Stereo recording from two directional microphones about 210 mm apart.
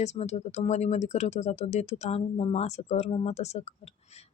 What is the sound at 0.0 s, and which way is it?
Speech, 35° left (ahead or behind).